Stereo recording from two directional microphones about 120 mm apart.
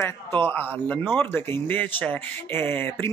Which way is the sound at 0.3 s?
15° left (ahead or behind).